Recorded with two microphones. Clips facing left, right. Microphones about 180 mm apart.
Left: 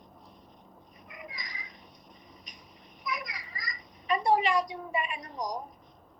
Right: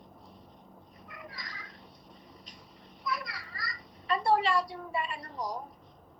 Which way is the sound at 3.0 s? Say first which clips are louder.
Right 1 dB; 15° left (ahead or behind).